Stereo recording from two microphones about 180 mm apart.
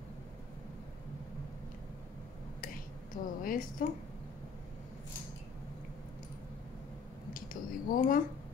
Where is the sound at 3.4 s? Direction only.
50° left (ahead or behind).